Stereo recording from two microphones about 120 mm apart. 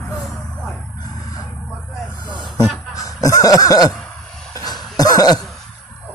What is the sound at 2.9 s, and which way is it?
Speech, 30° left (ahead or behind).